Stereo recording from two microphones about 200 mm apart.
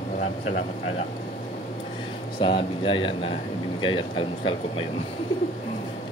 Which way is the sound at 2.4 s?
25° left (ahead or behind).